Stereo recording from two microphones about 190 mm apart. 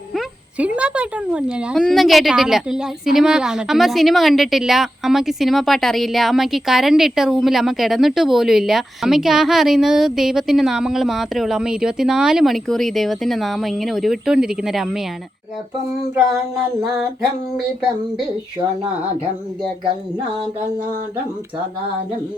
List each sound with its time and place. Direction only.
0.8 s a woman's voice: 5° right (ahead or behind)